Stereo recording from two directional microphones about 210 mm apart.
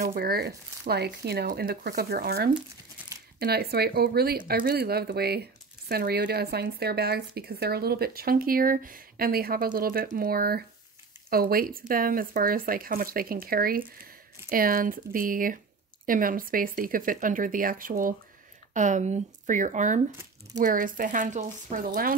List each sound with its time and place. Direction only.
0.0 s speech: 45° right (ahead or behind)